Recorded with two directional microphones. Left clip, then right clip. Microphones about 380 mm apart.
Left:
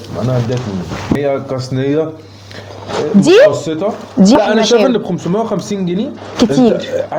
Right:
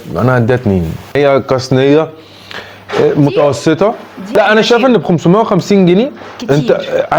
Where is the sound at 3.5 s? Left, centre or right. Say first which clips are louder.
Right 6 dB; right.